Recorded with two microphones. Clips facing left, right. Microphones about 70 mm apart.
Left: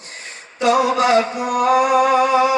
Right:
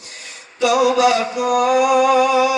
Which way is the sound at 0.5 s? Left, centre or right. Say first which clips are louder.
Right 1 dB; left.